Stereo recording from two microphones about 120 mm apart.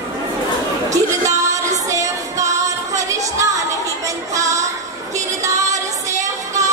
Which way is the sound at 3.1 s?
25° right (ahead or behind).